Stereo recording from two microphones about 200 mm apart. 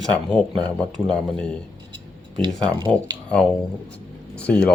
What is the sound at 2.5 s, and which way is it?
Speech, 5° left (ahead or behind).